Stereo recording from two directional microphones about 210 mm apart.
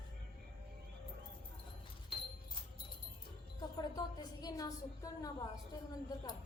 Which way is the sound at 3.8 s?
20° left (ahead or behind).